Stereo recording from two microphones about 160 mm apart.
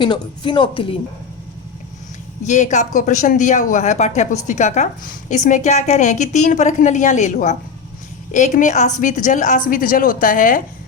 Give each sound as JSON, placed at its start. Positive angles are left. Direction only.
{"t": 0.0, "sound": "speech", "side_deg": 30}
{"t": 2.4, "sound": "a woman's voice", "side_deg": 50}